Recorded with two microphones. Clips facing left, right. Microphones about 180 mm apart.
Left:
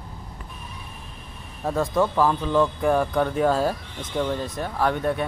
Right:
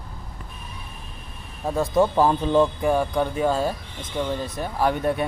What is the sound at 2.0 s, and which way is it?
Speech, 25° right (ahead or behind).